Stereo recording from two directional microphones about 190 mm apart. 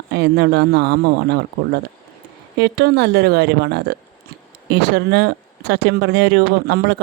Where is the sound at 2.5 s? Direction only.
60° right (ahead or behind).